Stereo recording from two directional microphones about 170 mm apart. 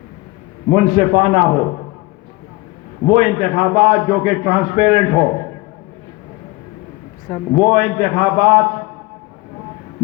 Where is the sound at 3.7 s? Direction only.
45° right (ahead or behind).